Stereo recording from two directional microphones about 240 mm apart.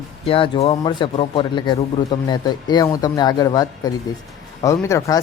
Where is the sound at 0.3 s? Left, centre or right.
Left.